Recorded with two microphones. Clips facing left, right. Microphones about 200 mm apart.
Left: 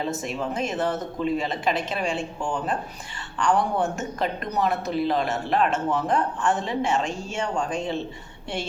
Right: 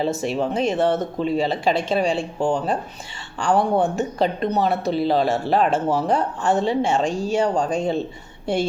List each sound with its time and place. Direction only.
0.0 s speech: 30° right (ahead or behind)